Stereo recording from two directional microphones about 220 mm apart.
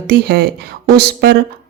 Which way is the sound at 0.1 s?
50° right (ahead or behind).